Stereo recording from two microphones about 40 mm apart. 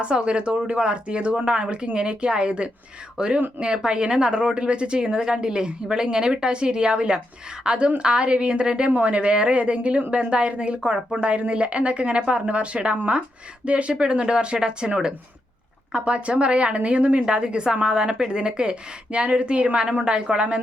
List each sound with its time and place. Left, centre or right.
0.0 s a woman's voice: right